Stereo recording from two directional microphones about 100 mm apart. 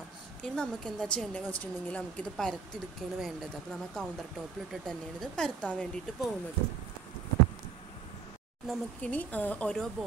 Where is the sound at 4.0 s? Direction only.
5° left (ahead or behind).